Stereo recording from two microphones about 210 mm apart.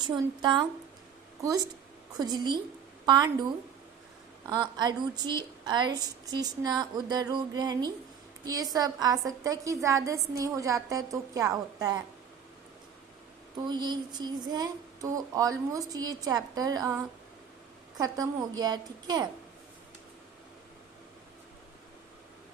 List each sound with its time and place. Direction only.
0.0 s a woman's voice: 20° right (ahead or behind)
4.6 s a woman's voice: 20° right (ahead or behind)
13.7 s a woman's voice: 20° right (ahead or behind)